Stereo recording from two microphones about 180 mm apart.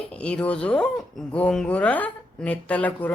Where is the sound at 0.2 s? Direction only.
5° left (ahead or behind).